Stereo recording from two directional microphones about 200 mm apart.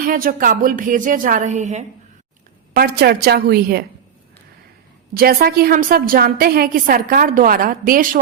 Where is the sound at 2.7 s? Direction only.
50° right (ahead or behind).